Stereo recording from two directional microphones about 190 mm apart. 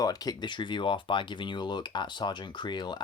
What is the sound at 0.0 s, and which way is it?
Speech, 20° left (ahead or behind).